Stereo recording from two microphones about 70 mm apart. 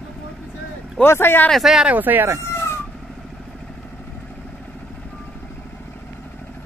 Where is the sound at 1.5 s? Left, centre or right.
Centre.